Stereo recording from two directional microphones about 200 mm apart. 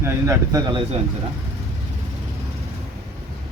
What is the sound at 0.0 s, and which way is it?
Speech, 15° right (ahead or behind).